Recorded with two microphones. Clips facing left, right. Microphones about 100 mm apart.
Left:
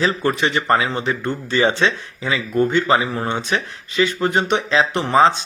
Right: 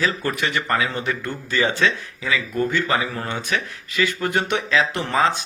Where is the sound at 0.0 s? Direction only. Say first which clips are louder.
Left 4 dB; 25° left (ahead or behind).